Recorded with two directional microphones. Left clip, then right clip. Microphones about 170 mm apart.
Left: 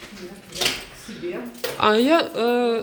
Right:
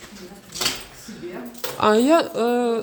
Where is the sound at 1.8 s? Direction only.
50° right (ahead or behind).